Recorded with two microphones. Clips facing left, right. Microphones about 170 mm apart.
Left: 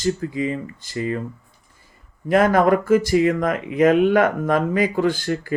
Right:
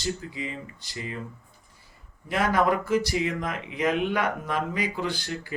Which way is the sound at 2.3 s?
50° left (ahead or behind).